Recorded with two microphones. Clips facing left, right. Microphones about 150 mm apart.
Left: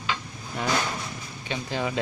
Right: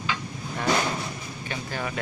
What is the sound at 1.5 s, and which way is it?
Speech, 20° left (ahead or behind).